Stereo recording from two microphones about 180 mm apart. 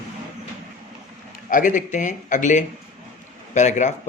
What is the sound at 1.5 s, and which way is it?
A man's voice, 45° left (ahead or behind).